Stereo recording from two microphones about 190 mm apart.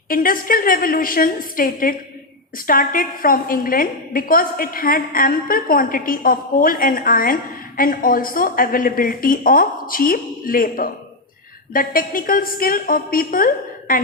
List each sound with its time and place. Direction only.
0.1 s a woman's voice: 50° left (ahead or behind)